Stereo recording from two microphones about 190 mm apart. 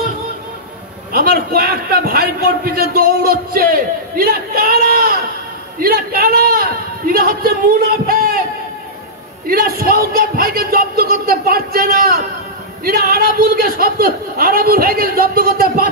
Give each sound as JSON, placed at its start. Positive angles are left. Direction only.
{"t": 1.1, "sound": "a man's voice", "side_deg": -50}
{"t": 9.5, "sound": "a man's voice", "side_deg": -50}